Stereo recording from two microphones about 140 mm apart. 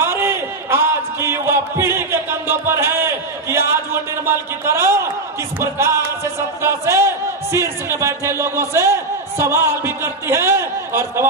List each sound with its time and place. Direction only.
0.0 s a sound: 20° right (ahead or behind)
1.2 s music: 20° right (ahead or behind)
2.5 s speech: 20° right (ahead or behind)
5.5 s music: 20° right (ahead or behind)
9.4 s a man's voice: 20° right (ahead or behind)